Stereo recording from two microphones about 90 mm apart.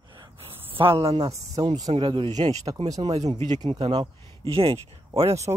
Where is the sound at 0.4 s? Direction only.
90° right.